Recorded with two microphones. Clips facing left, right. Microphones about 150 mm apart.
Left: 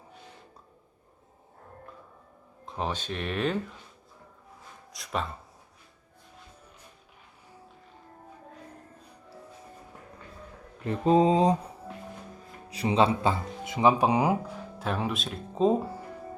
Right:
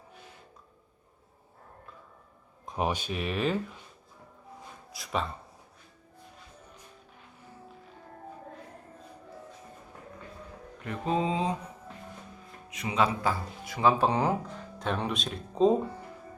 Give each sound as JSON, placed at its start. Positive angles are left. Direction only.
{"t": 2.6, "sound": "speech", "side_deg": -15}
{"t": 4.9, "sound": "speech", "side_deg": 0}
{"t": 10.8, "sound": "mantra", "side_deg": 35}
{"t": 12.7, "sound": "speech", "side_deg": 30}